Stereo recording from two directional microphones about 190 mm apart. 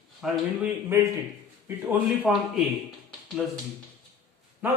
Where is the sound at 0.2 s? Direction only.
5° right (ahead or behind).